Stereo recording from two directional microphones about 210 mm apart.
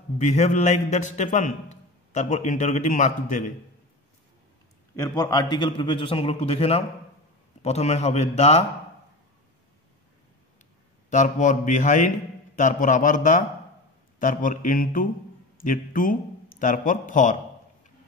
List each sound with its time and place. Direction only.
0.2 s a man's voice: 35° left (ahead or behind)
4.9 s a man's voice: 15° left (ahead or behind)
11.1 s a man's voice: 35° left (ahead or behind)